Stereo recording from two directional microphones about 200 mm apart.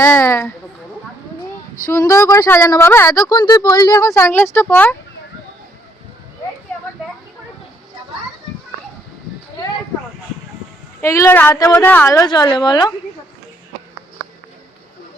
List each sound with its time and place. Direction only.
0.0 s a sound: 15° left (ahead or behind)
1.9 s speech: 15° left (ahead or behind)
11.0 s speech: 15° left (ahead or behind)